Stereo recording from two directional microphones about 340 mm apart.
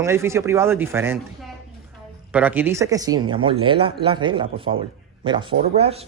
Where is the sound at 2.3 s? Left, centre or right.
Centre.